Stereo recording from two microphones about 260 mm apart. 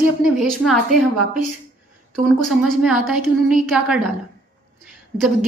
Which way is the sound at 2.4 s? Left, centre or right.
Centre.